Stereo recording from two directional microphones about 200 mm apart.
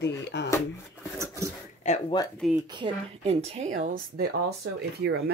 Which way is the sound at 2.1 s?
20° left (ahead or behind).